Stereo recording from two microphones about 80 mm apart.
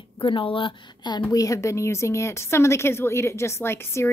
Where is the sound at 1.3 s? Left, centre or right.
Left.